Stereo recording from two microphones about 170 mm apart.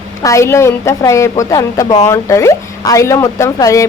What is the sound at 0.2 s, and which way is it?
A woman's voice, 20° left (ahead or behind).